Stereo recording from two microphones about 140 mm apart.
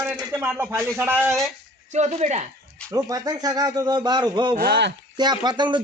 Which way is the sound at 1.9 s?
55° right (ahead or behind).